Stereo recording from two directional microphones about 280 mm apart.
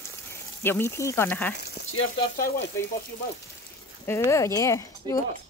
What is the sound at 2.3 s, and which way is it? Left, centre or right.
Frying, left.